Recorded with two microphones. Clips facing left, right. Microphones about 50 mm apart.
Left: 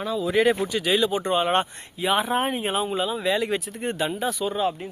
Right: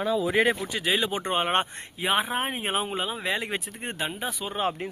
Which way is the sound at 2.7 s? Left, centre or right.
Right.